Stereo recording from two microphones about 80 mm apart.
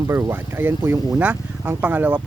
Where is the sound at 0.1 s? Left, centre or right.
Right.